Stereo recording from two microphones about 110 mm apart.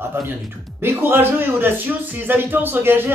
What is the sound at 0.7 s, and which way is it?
Speech, 20° right (ahead or behind).